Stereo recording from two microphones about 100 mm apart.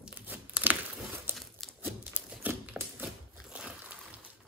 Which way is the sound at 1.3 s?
Centre (ahead or behind).